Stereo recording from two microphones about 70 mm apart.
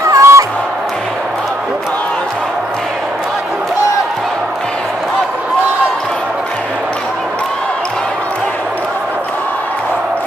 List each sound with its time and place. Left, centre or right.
0.1 s music: right